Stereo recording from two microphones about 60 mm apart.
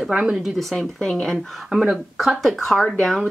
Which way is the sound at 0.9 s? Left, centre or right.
Centre.